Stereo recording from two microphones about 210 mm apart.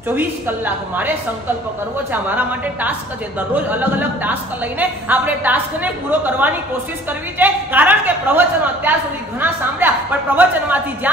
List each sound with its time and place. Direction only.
0.1 s a woman's voice: 10° right (ahead or behind)
2.2 s a woman's voice: 10° right (ahead or behind)